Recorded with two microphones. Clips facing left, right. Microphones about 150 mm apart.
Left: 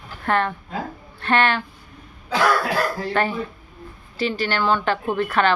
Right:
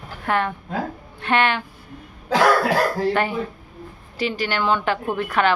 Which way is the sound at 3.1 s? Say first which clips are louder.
Even; 15° right (ahead or behind).